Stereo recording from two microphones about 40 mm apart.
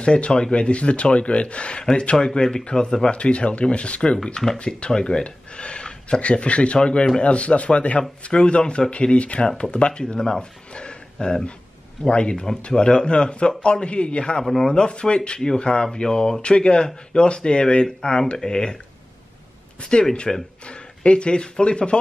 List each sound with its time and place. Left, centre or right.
0.0 s speech: left
3.2 s speech: left
4.2 s speech: centre
4.6 s speech: left
10.7 s a sound: left
12.0 s speech: left
14.4 s a man's voice: centre
14.7 s speech: left
19.8 s speech: left